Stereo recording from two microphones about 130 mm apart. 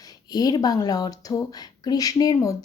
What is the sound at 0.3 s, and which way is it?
Speech, 30° left (ahead or behind).